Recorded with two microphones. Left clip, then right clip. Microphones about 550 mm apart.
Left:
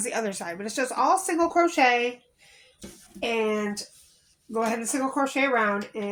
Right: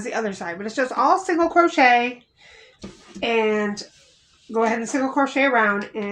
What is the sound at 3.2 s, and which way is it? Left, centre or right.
A woman's voice, left.